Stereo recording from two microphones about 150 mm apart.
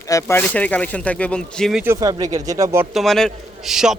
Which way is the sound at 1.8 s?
20° right (ahead or behind).